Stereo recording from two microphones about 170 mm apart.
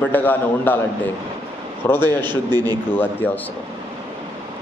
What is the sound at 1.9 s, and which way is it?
Speech, 25° right (ahead or behind).